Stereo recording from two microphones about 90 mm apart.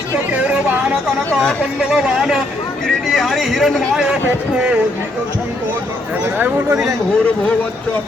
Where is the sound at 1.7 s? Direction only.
5° right (ahead or behind).